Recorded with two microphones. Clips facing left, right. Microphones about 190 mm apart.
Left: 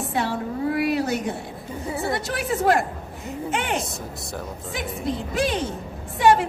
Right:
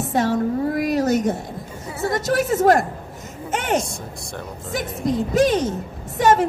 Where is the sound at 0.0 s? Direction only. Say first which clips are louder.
Right 6 dB; 45° right (ahead or behind).